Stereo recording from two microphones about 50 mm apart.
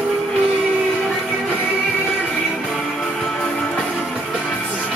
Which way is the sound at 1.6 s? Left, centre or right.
Centre.